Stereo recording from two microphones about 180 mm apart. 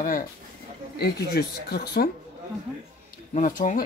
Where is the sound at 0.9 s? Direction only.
60° left (ahead or behind).